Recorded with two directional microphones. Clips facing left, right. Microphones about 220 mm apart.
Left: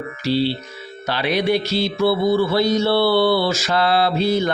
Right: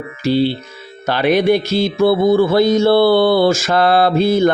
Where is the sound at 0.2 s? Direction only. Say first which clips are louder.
Right 5 dB; 50° right (ahead or behind).